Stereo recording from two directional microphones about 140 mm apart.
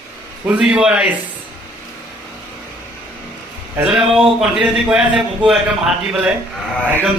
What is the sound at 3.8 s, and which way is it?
A man's voice, 5° right (ahead or behind).